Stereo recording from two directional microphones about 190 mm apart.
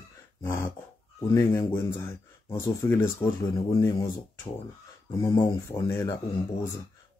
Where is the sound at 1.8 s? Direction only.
25° left (ahead or behind).